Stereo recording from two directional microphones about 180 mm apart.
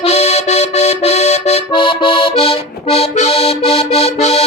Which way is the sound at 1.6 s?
25° left (ahead or behind).